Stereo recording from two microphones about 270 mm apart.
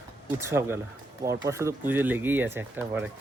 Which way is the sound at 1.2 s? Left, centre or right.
Centre.